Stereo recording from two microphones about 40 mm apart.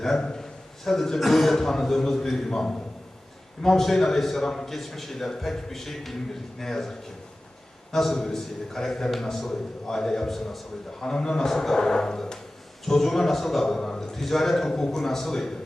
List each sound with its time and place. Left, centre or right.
0.0 s a man's voice: centre
7.9 s a man's voice: centre
11.0 s a man's voice: centre